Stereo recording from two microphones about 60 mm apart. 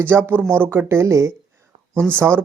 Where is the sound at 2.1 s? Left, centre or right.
Right.